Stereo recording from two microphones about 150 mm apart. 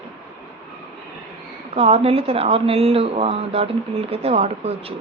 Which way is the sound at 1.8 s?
40° right (ahead or behind).